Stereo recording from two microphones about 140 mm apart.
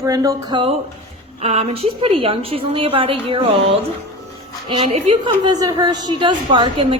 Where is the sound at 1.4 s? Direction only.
50° right (ahead or behind).